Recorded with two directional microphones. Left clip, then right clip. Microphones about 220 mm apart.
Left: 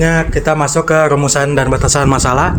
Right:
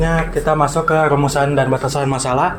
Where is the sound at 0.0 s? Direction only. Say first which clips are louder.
Left 4 dB; 45° left (ahead or behind).